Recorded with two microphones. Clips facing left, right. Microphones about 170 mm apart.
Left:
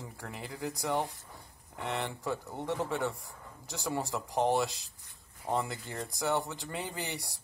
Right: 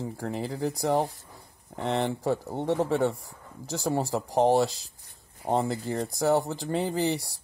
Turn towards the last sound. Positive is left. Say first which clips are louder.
# right 12 dB
turn(degrees=-35)  # may be behind; listen again after turning